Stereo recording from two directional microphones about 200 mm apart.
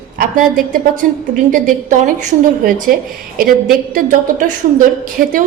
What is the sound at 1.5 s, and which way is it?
A woman's voice, 40° right (ahead or behind).